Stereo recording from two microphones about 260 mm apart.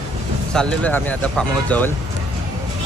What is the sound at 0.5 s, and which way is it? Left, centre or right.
Speech, centre.